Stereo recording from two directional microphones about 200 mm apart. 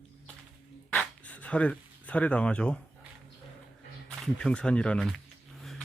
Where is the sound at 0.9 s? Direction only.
5° left (ahead or behind).